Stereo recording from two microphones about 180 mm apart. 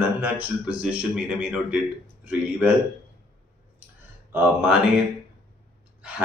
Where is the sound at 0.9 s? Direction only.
5° right (ahead or behind).